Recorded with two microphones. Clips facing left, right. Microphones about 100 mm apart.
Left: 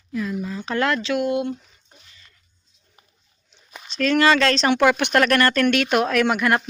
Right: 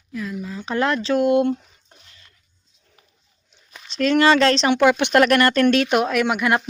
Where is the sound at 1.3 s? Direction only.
55° right (ahead or behind).